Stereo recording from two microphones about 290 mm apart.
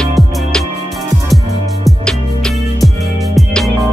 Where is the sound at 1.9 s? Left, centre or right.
Centre.